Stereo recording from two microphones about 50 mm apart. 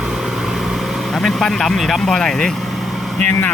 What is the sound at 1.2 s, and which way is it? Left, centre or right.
Vehicle, centre.